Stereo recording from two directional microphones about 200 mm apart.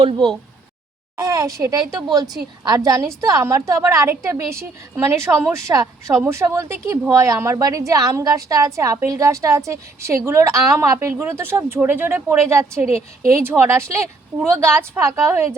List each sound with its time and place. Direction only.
0.0 s a woman's voice: 25° right (ahead or behind)